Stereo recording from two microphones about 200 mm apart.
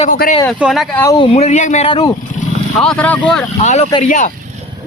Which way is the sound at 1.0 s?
15° left (ahead or behind).